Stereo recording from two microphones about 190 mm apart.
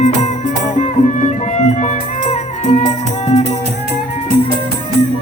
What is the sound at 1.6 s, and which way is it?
Music, 35° left (ahead or behind).